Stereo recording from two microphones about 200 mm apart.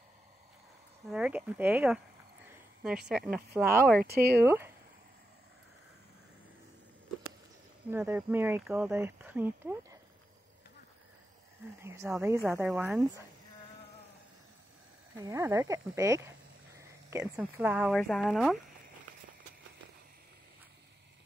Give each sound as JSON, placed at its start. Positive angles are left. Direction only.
{"t": 1.0, "sound": "speech", "side_deg": -5}
{"t": 4.0, "sound": "speech", "side_deg": -50}
{"t": 4.4, "sound": "speech", "side_deg": -10}
{"t": 7.9, "sound": "speech", "side_deg": -10}
{"t": 11.8, "sound": "speech", "side_deg": -15}
{"t": 15.2, "sound": "speech", "side_deg": -15}